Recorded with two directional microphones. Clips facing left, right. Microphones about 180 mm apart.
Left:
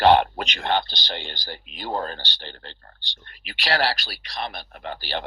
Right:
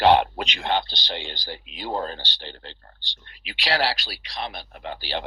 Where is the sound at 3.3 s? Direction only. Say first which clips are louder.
Left 1 dB; 50° left (ahead or behind).